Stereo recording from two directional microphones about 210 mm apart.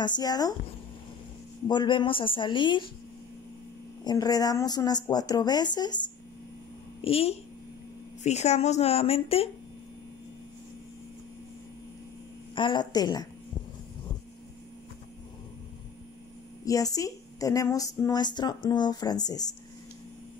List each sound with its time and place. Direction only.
0.0 s speech: 20° left (ahead or behind)
1.7 s speech: 20° left (ahead or behind)
4.0 s speech: 20° left (ahead or behind)
12.5 s speech: 20° left (ahead or behind)
16.6 s a woman's voice: 15° left (ahead or behind)